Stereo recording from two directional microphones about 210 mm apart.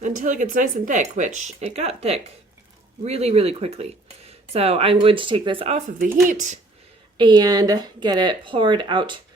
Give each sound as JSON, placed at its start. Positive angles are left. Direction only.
{"t": 0.0, "sound": "speech", "side_deg": -40}
{"t": 7.2, "sound": "speech", "side_deg": -20}